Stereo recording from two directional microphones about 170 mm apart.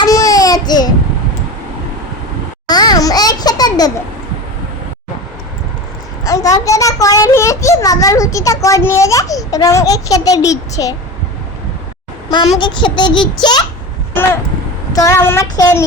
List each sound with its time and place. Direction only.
0.0 s baby cry: 20° left (ahead or behind)
2.6 s a sound: 25° left (ahead or behind)
6.2 s a child's voice: 20° left (ahead or behind)
12.5 s a child's voice: 25° left (ahead or behind)
14.9 s child singing: 15° left (ahead or behind)